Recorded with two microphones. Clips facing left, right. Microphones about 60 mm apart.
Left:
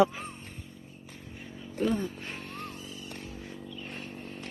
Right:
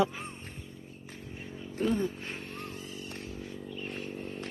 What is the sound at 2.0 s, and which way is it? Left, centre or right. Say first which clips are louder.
Vehicle: right 3 dB; right.